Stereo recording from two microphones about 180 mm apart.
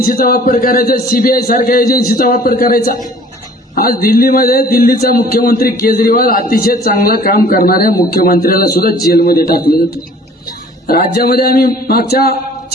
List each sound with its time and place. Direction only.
0.0 s a man's voice: 55° left (ahead or behind)